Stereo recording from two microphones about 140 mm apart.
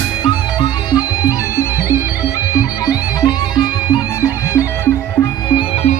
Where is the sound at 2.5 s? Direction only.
25° left (ahead or behind).